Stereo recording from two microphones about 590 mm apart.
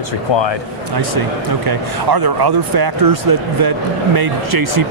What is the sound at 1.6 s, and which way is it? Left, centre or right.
Speech, right.